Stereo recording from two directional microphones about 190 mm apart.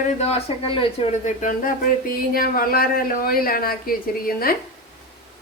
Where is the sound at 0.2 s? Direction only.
35° left (ahead or behind).